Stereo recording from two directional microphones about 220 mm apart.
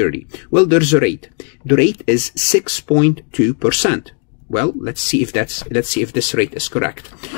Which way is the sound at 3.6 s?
5° left (ahead or behind).